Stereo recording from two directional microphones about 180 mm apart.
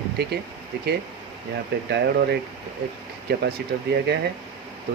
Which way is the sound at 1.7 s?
65° right (ahead or behind).